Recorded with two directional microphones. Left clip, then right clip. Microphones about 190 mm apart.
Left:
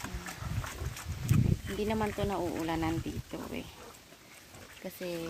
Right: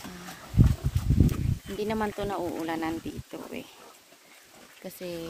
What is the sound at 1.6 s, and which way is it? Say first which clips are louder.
Speech: right 5 dB; 20° right (ahead or behind).